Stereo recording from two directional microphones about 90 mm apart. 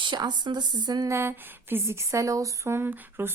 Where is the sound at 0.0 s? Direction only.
60° right (ahead or behind).